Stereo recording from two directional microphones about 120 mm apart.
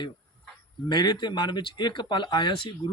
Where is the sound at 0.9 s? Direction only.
35° left (ahead or behind).